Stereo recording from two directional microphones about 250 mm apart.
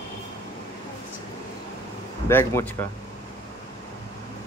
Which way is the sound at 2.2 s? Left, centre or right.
Centre.